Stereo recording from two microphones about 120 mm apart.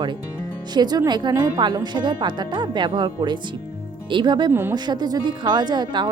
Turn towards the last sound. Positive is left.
turn(degrees=-40)  # may be behind; listen again after turning